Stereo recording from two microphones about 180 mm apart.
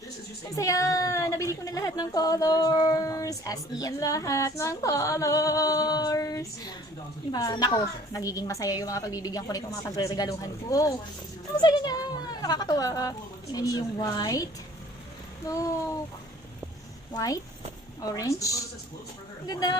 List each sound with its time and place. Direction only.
0.5 s a woman's voice: 15° left (ahead or behind)
15.4 s a woman's voice: 20° left (ahead or behind)
17.2 s a woman's voice: 20° left (ahead or behind)